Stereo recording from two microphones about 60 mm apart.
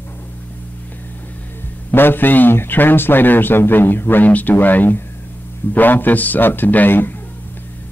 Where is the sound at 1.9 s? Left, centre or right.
Left.